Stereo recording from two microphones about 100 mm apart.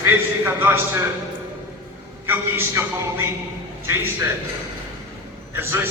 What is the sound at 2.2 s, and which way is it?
A man's voice, 25° right (ahead or behind).